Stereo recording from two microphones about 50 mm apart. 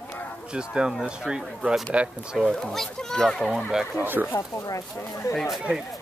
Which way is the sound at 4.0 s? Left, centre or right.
Right.